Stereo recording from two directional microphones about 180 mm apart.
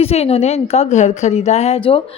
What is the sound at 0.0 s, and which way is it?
A woman's voice, 35° left (ahead or behind).